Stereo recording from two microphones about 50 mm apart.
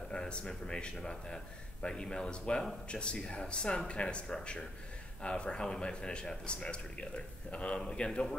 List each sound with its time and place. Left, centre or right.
0.1 s a man's voice: centre